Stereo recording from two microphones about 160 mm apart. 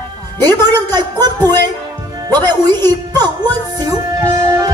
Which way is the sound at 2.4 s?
25° right (ahead or behind).